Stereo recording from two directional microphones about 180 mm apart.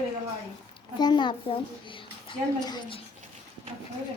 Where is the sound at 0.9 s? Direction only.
25° left (ahead or behind).